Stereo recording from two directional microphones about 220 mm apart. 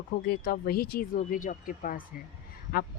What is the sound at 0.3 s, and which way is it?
Speech, 40° left (ahead or behind).